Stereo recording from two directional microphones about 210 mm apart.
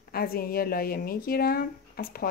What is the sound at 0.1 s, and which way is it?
Speech, 45° left (ahead or behind).